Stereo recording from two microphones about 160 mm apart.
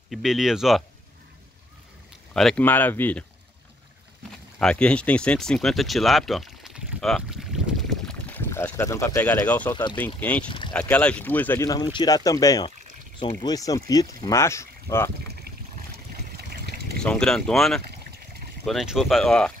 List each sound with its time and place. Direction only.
0.1 s speech: centre (ahead or behind)
2.3 s speech: 5° left (ahead or behind)
4.6 s speech: 5° left (ahead or behind)
8.1 s boat: 10° left (ahead or behind)
9.5 s speech: 10° left (ahead or behind)
16.3 s trickle: 80° right
17.0 s speech: 5° left (ahead or behind)